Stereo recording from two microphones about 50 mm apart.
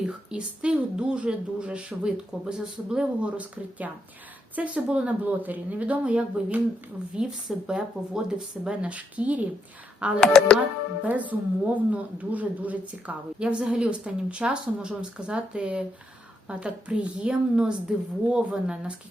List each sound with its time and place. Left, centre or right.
0.0 s a woman's voice: centre
10.2 s speech: centre
11.0 s a woman's voice: right; by 18.9 s centre